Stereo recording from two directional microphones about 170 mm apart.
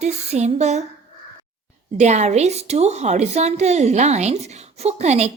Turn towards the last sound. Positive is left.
turn(degrees=-40)  # may be behind; listen again after turning